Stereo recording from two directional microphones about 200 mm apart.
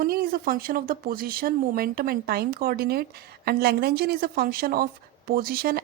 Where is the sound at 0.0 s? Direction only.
45° right (ahead or behind).